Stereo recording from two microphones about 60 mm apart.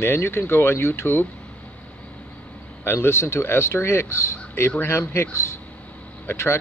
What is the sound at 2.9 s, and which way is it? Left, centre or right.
Speech, left.